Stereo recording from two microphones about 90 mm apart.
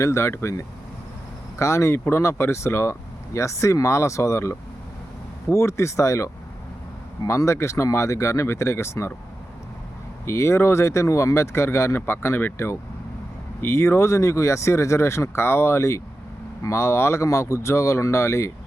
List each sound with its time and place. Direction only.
0.0 s speech: 30° left (ahead or behind)
10.2 s speech: 30° left (ahead or behind)